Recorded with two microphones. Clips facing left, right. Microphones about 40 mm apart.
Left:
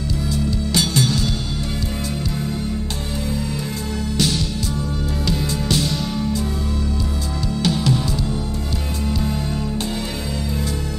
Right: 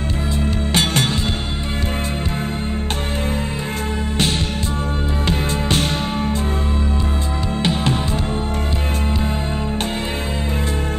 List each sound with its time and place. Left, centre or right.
0.4 s music: right
5.2 s music: right
7.6 s music: right